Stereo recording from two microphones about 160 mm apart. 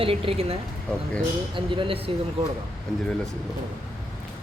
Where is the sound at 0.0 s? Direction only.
35° right (ahead or behind).